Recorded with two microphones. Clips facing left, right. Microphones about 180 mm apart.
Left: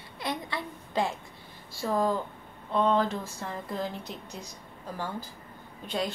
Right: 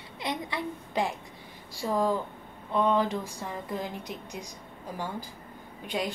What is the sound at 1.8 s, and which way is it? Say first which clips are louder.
A woman's voice: even; 10° right (ahead or behind).